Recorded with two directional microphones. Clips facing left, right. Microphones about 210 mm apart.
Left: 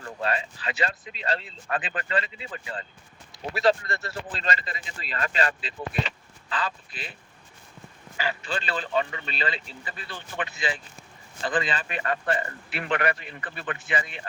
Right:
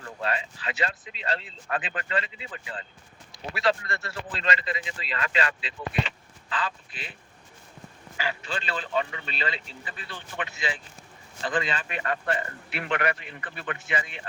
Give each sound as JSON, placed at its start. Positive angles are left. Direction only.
{"t": 0.2, "sound": "speech", "side_deg": 35}
{"t": 8.2, "sound": "speech", "side_deg": 35}